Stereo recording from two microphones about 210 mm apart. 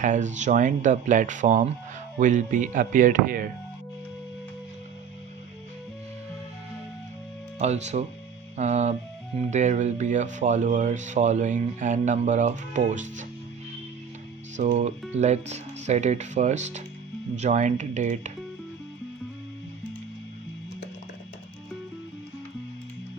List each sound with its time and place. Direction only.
0.0 s speech: 35° right (ahead or behind)
7.6 s speech: 30° right (ahead or behind)
14.5 s speech: 35° right (ahead or behind)